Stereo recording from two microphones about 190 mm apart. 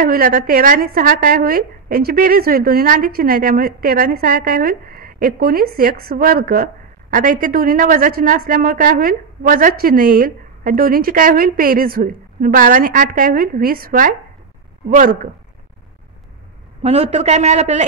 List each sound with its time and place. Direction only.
0.0 s a woman's voice: 45° right (ahead or behind)
16.8 s a man's voice: 35° right (ahead or behind)